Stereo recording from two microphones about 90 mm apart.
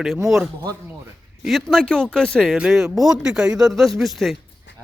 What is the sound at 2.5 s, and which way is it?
Speech, 10° right (ahead or behind).